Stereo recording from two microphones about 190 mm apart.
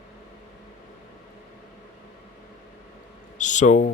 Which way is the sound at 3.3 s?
40° left (ahead or behind).